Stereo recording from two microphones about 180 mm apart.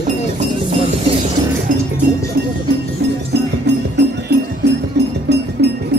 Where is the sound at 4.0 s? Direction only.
70° right (ahead or behind).